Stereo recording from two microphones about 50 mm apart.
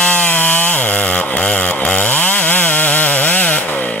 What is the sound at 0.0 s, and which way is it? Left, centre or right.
Chainsaw, left.